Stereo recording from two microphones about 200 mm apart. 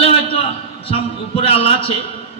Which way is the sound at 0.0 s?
30° left (ahead or behind).